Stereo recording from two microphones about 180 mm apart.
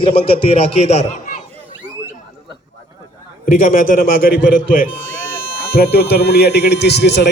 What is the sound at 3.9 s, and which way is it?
Speech, 55° left (ahead or behind).